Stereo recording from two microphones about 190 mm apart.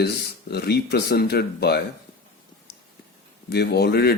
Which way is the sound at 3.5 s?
60° left (ahead or behind).